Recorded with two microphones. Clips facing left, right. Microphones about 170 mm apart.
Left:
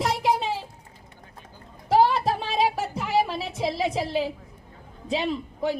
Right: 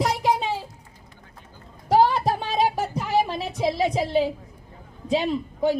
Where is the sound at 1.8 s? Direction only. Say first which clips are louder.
Right 1 dB; centre (ahead or behind).